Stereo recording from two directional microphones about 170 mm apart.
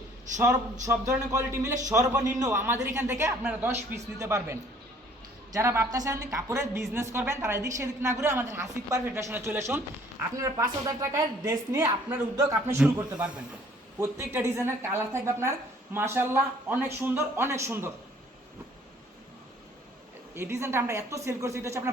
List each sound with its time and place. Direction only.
0.4 s a woman's voice: 20° right (ahead or behind)
5.5 s a woman's voice: 15° right (ahead or behind)
20.3 s a woman's voice: 15° right (ahead or behind)